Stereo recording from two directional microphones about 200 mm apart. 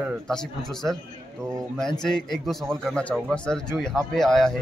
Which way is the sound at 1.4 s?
15° right (ahead or behind).